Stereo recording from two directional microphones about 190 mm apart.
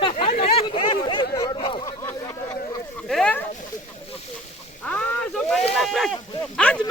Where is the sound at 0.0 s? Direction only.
30° left (ahead or behind).